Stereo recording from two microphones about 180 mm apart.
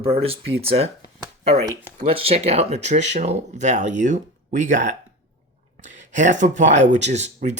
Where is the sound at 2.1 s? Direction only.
30° right (ahead or behind).